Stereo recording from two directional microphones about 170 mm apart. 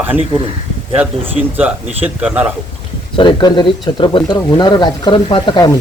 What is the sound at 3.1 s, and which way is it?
Speech, 25° left (ahead or behind).